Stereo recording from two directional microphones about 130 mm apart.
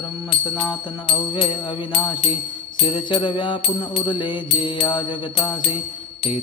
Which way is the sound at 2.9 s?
40° left (ahead or behind).